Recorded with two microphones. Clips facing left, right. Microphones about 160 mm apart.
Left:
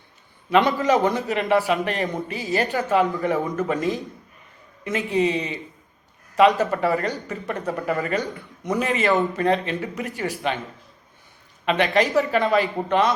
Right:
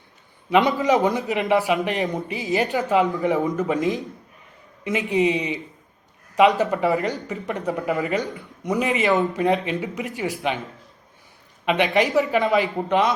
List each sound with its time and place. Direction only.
0.8 s speech: 15° right (ahead or behind)
6.6 s speech: 15° right (ahead or behind)
11.6 s speech: 15° right (ahead or behind)